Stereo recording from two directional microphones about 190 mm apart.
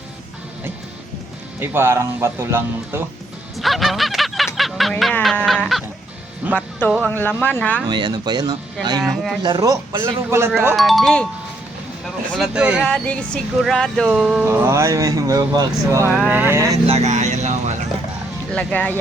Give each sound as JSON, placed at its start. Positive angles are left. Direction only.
{"t": 1.5, "sound": "speech", "side_deg": -10}
{"t": 3.6, "sound": "a sound", "side_deg": 0}
{"t": 6.5, "sound": "speech", "side_deg": 5}
{"t": 7.9, "sound": "speech", "side_deg": -25}
{"t": 9.0, "sound": "speech", "side_deg": 0}
{"t": 9.4, "sound": "speech", "side_deg": -20}
{"t": 10.8, "sound": "speech", "side_deg": 0}
{"t": 12.3, "sound": "speech", "side_deg": -5}
{"t": 12.9, "sound": "speech", "side_deg": 5}
{"t": 14.4, "sound": "speech", "side_deg": -10}
{"t": 16.8, "sound": "speech", "side_deg": -35}
{"t": 18.5, "sound": "speech", "side_deg": 5}